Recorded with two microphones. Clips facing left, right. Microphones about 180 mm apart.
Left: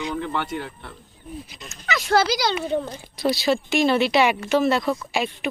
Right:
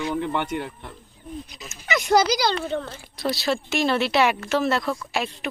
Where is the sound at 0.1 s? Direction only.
15° right (ahead or behind).